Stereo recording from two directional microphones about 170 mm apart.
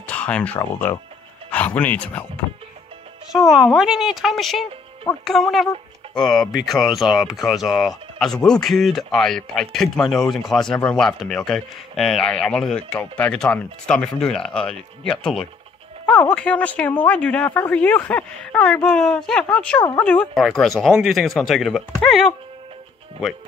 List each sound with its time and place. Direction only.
0.0 s a sound: 10° left (ahead or behind)
0.6 s a woman's voice: 15° left (ahead or behind)
3.3 s a woman's voice: 5° right (ahead or behind)